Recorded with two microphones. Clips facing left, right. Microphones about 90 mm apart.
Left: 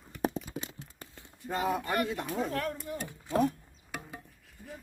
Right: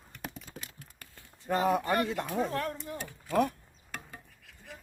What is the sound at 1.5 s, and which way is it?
Speech, 45° right (ahead or behind).